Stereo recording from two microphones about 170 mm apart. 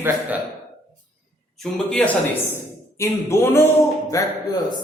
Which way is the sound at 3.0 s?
15° left (ahead or behind).